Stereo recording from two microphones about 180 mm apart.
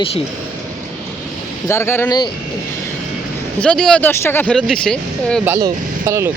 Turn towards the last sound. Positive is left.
turn(degrees=-15)  # may be behind; listen again after turning